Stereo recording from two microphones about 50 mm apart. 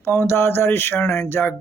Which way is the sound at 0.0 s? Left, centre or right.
Left.